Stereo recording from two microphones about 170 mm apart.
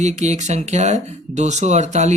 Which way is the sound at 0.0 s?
40° right (ahead or behind).